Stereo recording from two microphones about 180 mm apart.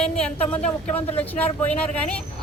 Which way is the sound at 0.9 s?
10° left (ahead or behind).